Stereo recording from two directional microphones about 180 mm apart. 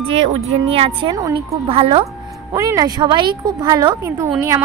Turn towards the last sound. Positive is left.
turn(degrees=-15)  # may be behind; listen again after turning